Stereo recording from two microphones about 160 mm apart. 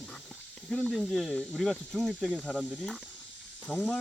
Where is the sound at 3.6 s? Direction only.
10° left (ahead or behind).